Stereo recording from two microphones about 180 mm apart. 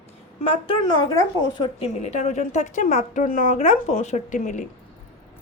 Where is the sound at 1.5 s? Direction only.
35° left (ahead or behind).